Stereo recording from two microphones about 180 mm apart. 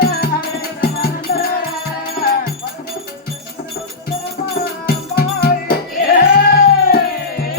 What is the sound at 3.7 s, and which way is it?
Music, 55° left (ahead or behind).